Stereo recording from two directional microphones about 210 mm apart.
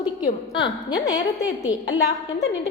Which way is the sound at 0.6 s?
20° left (ahead or behind).